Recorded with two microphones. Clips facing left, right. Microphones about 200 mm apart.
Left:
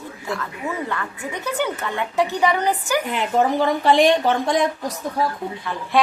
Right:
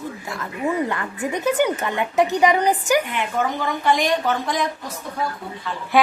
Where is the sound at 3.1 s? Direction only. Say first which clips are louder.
Left 4 dB; 35° left (ahead or behind).